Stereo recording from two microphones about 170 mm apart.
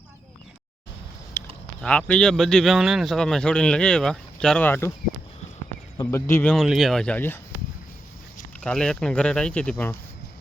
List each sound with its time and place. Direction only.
1.4 s a sound: 15° left (ahead or behind)
1.8 s speech: 5° left (ahead or behind)
6.1 s speech: 15° left (ahead or behind)
6.5 s speech: centre (ahead or behind)
8.6 s speech: 5° left (ahead or behind)